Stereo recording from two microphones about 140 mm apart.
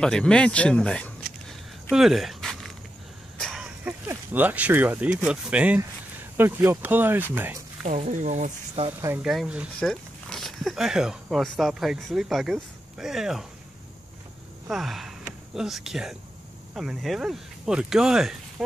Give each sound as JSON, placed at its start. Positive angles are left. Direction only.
{"t": 0.0, "sound": "a sound", "side_deg": 5}
{"t": 3.3, "sound": "speech", "side_deg": 0}
{"t": 7.8, "sound": "speech", "side_deg": -60}
{"t": 9.2, "sound": "speech", "side_deg": -5}
{"t": 14.7, "sound": "speech", "side_deg": 0}